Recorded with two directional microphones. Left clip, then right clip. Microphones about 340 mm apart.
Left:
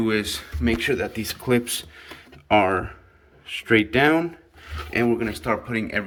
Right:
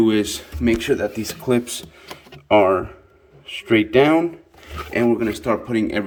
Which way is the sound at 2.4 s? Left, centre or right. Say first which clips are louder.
Right 4 dB; centre.